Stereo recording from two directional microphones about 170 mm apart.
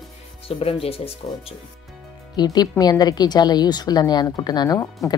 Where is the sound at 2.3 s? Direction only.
25° left (ahead or behind).